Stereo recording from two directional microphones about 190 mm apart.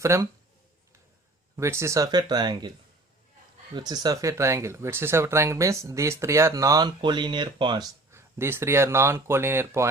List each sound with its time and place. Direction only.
0.0 s speech: 15° right (ahead or behind)
1.5 s speech: 15° right (ahead or behind)
3.8 s speech: 20° right (ahead or behind)
8.1 s speech: 15° right (ahead or behind)